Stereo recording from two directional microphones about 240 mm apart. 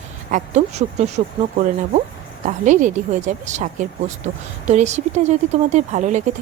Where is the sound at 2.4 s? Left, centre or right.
Right.